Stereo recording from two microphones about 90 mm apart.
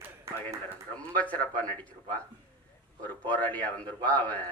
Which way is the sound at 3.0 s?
15° left (ahead or behind).